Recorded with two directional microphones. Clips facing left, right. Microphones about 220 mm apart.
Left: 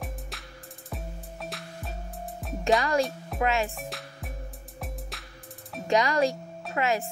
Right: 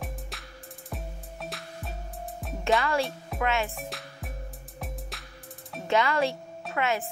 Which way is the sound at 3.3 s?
35° left (ahead or behind).